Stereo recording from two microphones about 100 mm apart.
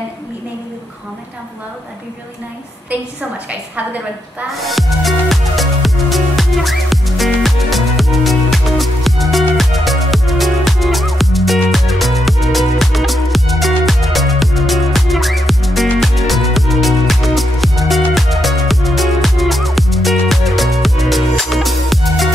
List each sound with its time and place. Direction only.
2.9 s a woman's voice: 15° right (ahead or behind)
4.6 s music: centre (ahead or behind)